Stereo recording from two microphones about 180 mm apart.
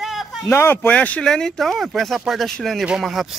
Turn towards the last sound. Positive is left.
turn(degrees=0)  # may be behind; listen again after turning